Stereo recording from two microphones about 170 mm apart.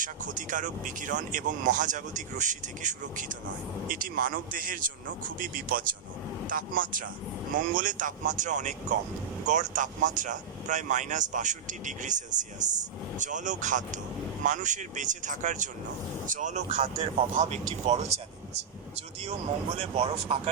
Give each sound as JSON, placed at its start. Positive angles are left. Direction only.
{"t": 0.0, "sound": "speech", "side_deg": -50}
{"t": 19.2, "sound": "speech", "side_deg": -35}